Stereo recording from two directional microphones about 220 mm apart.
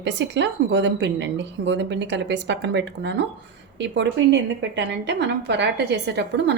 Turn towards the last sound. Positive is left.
turn(degrees=-50)  # may be behind; listen again after turning